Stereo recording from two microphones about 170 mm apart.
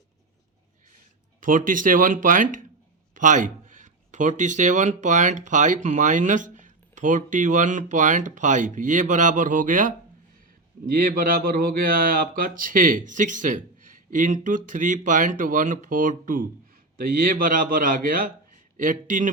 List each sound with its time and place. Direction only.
1.4 s a man's voice: 50° right (ahead or behind)